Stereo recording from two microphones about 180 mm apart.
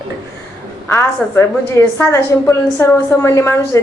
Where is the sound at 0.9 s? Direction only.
15° left (ahead or behind).